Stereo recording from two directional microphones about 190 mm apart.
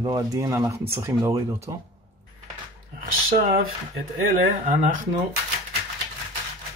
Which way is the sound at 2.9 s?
50° right (ahead or behind).